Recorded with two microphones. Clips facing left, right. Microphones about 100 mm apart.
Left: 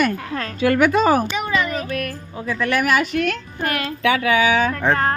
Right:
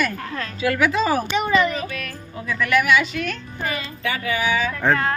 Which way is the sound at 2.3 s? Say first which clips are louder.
Right 1 dB; 30° left (ahead or behind).